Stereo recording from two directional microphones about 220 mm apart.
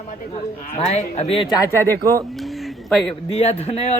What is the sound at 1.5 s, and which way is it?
Speech, 15° left (ahead or behind).